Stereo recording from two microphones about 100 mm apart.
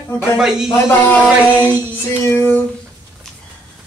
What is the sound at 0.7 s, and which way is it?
Speech, 25° left (ahead or behind).